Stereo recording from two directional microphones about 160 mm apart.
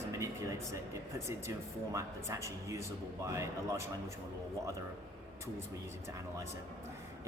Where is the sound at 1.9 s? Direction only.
20° right (ahead or behind).